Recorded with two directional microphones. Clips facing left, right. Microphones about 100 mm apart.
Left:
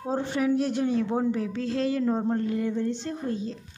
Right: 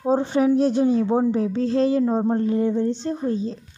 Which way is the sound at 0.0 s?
20° right (ahead or behind).